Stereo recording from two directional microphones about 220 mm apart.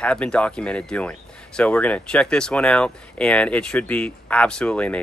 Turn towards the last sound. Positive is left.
turn(degrees=5)  # may be behind; listen again after turning